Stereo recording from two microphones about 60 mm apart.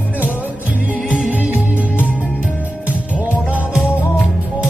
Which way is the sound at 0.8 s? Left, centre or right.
Right.